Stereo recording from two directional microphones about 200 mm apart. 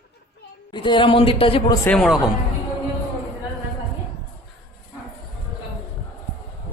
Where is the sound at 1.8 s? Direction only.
5° left (ahead or behind).